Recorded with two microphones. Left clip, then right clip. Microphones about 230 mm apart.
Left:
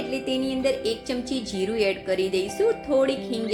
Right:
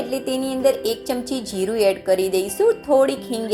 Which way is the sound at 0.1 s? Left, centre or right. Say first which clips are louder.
Right 3 dB; centre.